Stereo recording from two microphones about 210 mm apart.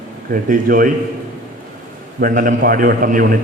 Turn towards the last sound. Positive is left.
turn(degrees=-40)  # may be behind; listen again after turning